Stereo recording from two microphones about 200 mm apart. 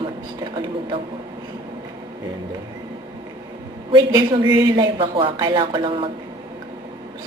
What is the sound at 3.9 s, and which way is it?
Speech, 20° right (ahead or behind).